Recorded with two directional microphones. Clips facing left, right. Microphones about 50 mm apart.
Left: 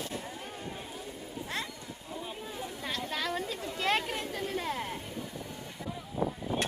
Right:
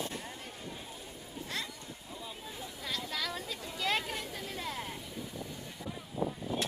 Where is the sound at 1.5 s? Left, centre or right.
Left.